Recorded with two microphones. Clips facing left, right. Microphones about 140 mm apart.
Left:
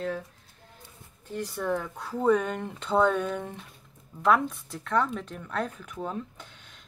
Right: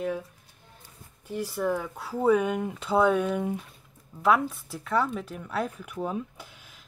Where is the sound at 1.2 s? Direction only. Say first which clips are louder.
Right 3 dB; 5° right (ahead or behind).